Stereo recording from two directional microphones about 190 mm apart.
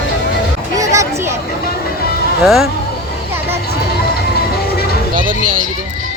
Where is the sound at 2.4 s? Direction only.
Centre (ahead or behind).